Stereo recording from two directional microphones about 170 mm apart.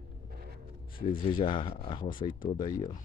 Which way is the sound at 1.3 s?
30° left (ahead or behind).